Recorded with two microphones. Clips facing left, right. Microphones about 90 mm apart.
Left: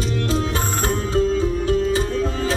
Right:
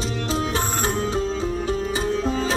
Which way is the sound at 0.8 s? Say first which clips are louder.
Left 7 dB; 20° right (ahead or behind).